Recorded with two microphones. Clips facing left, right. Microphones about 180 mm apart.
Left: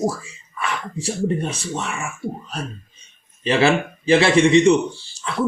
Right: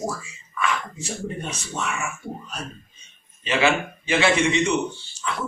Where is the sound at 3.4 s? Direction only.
35° left (ahead or behind).